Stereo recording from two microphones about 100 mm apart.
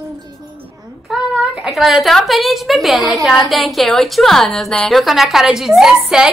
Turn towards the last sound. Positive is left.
turn(degrees=-5)  # may be behind; listen again after turning